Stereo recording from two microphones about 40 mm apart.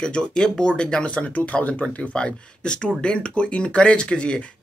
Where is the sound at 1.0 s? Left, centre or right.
Left.